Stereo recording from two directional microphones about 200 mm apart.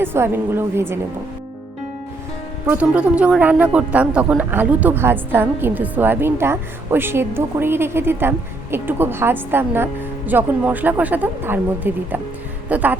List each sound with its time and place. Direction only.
0.0 s a woman's voice: 10° right (ahead or behind)
2.6 s a woman's voice: 5° right (ahead or behind)